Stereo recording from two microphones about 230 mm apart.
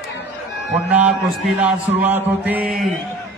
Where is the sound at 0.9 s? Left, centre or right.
Centre.